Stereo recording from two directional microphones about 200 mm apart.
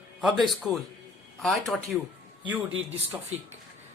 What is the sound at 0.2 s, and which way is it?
A man's voice, centre (ahead or behind).